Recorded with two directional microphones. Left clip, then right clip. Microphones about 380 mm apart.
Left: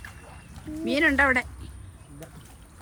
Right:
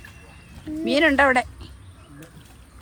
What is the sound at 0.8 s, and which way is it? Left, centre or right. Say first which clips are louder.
Speech: right 4 dB; centre.